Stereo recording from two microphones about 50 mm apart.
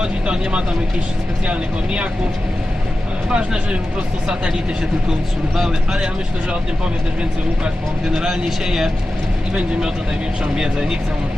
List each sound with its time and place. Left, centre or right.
0.0 s speech: centre
3.2 s speech: centre
5.5 s speech: centre
8.2 s speech: centre
10.5 s speech: centre